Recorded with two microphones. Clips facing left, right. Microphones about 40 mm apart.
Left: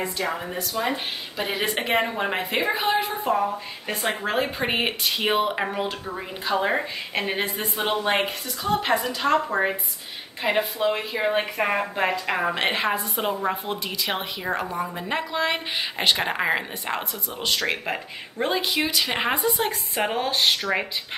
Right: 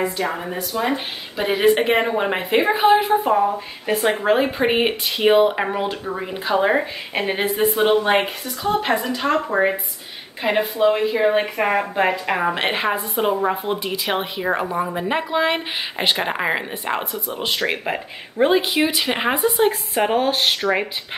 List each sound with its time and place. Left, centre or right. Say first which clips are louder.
0.8 s speech: right 4 dB; centre
7.4 s a woman's voice: right 10 dB; right
7.7 s speech: right 5 dB; centre
16.3 s a woman's voice: right 2 dB; centre
16.8 s speech: right 5 dB; centre